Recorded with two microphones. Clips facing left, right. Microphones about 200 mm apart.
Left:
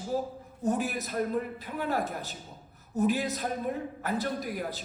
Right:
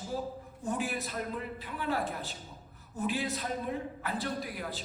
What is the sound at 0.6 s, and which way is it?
A man's voice, 40° left (ahead or behind).